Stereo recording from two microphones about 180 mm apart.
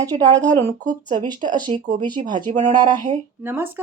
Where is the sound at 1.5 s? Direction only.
25° right (ahead or behind).